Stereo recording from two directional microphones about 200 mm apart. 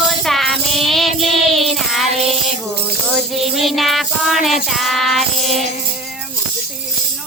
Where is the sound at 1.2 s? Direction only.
Centre (ahead or behind).